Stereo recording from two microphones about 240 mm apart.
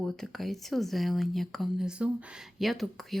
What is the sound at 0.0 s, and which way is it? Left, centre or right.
Speech, centre.